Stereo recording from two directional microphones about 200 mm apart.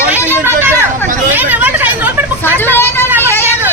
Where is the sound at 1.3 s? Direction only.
10° right (ahead or behind).